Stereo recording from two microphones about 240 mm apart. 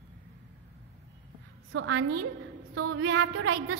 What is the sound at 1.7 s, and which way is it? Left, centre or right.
A woman's voice, right.